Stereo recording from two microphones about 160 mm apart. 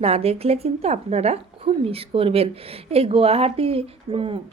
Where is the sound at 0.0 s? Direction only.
40° right (ahead or behind).